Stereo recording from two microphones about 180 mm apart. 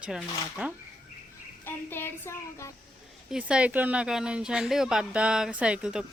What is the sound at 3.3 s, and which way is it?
A woman's voice, 5° right (ahead or behind).